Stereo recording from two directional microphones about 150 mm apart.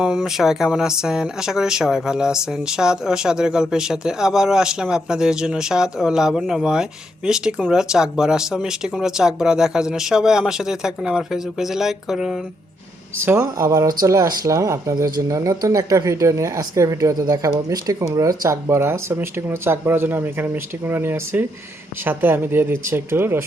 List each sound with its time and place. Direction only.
0.0 s speech: 5° right (ahead or behind)
13.1 s speech: 15° right (ahead or behind)